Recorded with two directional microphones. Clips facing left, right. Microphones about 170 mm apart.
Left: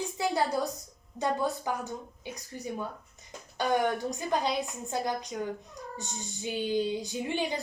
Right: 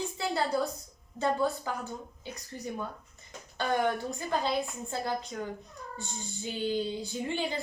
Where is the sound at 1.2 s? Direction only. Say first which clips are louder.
Right 1 dB; 15° left (ahead or behind).